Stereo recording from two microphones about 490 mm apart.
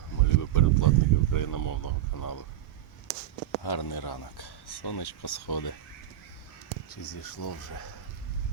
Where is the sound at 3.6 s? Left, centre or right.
Left.